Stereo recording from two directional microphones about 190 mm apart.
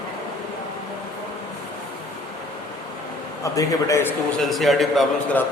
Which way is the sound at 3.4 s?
15° left (ahead or behind).